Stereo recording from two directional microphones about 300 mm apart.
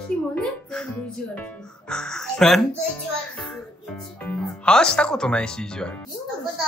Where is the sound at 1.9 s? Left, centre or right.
Centre.